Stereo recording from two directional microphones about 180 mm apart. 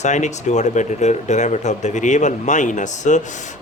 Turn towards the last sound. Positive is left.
turn(degrees=40)  # may be behind; listen again after turning